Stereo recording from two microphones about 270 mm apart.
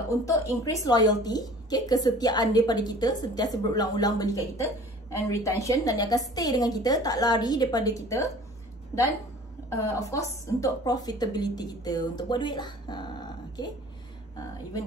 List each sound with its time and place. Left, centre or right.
0.2 s a woman's voice: centre
9.8 s a woman's voice: centre